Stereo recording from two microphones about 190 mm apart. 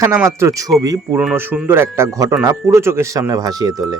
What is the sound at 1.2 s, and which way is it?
Speech, 5° right (ahead or behind).